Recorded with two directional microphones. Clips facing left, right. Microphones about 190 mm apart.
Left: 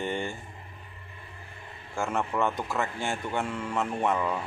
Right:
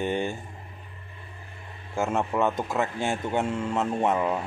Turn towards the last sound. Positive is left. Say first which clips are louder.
# right 3 dB
turn(degrees=-20)  # may be behind; listen again after turning